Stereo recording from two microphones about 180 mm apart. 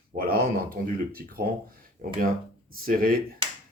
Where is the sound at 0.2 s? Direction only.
55° right (ahead or behind).